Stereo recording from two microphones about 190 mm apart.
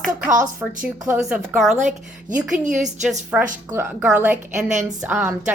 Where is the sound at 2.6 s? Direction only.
40° right (ahead or behind).